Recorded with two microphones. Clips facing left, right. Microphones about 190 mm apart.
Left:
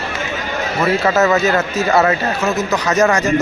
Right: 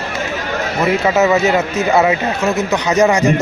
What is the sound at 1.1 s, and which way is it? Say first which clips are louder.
A man's voice: right 2 dB; 10° right (ahead or behind).